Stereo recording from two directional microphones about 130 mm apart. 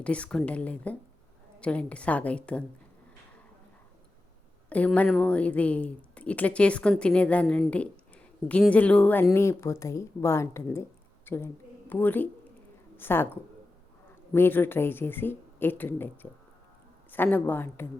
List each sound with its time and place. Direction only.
0.0 s speech: 10° left (ahead or behind)
4.7 s speech: 10° left (ahead or behind)
7.7 s a sound: 10° left (ahead or behind)
8.7 s a woman's voice: 10° left (ahead or behind)